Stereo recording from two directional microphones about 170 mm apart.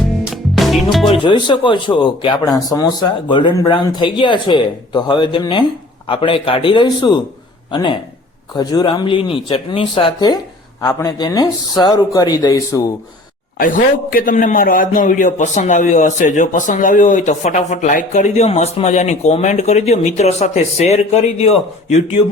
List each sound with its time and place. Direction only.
0.5 s music: centre (ahead or behind)
1.0 s a man's voice: 30° left (ahead or behind)
13.6 s a man's voice: 55° left (ahead or behind); by 22.2 s 40° left (ahead or behind)